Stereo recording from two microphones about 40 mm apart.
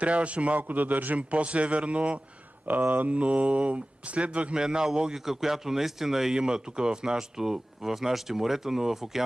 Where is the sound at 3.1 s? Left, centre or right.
Right.